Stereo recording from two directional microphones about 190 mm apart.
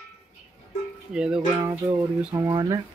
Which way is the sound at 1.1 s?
5° right (ahead or behind).